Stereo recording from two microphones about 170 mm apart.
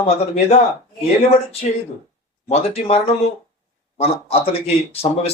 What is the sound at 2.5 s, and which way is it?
Speech, 40° left (ahead or behind).